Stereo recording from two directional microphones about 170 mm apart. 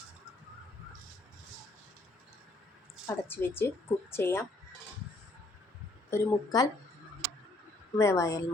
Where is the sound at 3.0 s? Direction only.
15° left (ahead or behind).